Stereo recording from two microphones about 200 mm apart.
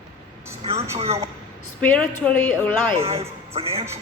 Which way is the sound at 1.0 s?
30° right (ahead or behind).